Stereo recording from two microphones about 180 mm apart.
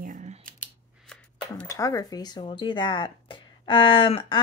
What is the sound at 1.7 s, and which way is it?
Speech, 15° left (ahead or behind).